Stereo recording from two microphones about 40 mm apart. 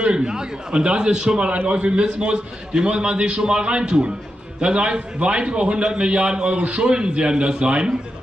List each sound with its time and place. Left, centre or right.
0.0 s a man's voice: right